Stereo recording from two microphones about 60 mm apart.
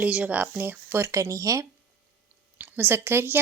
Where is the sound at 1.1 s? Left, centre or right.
Right.